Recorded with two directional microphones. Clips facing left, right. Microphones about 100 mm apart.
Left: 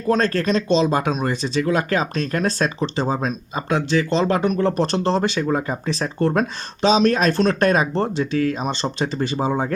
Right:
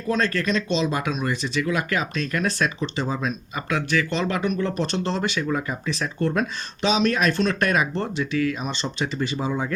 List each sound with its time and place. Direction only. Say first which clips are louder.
0.1 s speech: left 4 dB; 35° left (ahead or behind)